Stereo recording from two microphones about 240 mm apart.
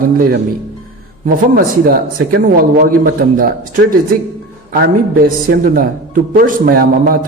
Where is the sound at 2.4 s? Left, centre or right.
Right.